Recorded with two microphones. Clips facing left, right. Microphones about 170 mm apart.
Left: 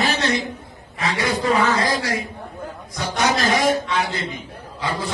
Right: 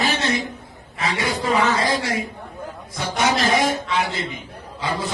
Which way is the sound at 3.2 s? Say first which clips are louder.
Even; 25° right (ahead or behind).